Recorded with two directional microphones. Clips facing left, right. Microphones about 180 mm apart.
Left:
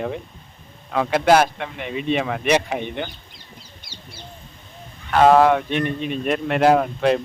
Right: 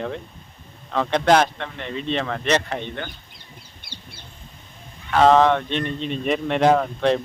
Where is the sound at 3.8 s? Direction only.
55° right (ahead or behind).